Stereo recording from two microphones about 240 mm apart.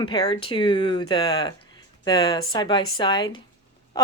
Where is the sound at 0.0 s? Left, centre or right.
Centre.